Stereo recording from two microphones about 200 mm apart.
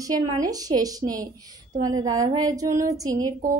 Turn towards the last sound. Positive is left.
turn(degrees=-20)  # may be behind; listen again after turning